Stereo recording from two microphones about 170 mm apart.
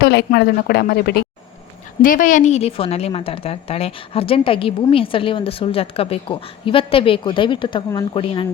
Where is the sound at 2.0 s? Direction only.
50° left (ahead or behind).